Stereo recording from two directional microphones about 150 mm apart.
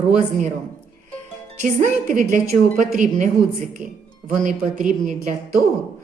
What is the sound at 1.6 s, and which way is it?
A woman's voice, 60° right (ahead or behind).